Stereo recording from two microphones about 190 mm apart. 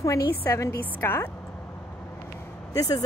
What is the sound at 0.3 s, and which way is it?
A woman's voice, 15° left (ahead or behind).